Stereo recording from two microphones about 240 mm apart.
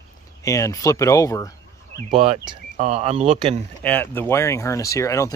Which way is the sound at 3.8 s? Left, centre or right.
Centre.